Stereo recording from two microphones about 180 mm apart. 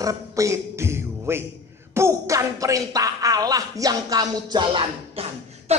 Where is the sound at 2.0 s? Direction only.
15° right (ahead or behind).